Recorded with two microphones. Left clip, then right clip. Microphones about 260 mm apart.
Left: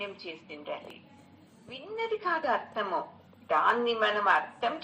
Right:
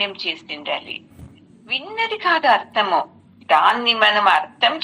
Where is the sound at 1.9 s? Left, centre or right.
Right.